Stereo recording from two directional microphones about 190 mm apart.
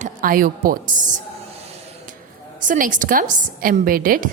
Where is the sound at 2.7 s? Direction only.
45° right (ahead or behind).